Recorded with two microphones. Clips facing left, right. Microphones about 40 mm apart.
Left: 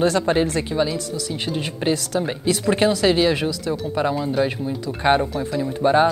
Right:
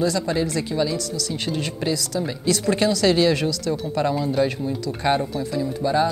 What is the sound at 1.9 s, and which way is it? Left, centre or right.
Speech, left.